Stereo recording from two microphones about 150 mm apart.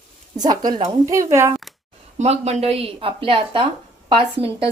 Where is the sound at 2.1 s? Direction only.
45° right (ahead or behind).